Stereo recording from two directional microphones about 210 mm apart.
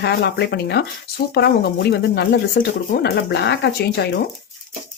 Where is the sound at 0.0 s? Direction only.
50° left (ahead or behind).